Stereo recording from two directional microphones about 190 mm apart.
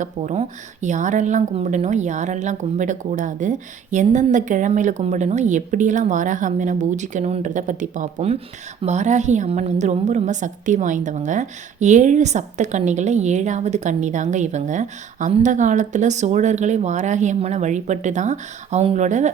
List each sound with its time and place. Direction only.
0.0 s a woman's voice: 35° right (ahead or behind)